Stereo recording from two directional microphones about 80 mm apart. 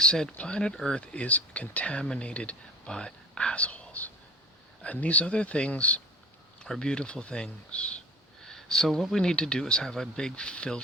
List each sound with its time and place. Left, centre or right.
0.0 s speech: centre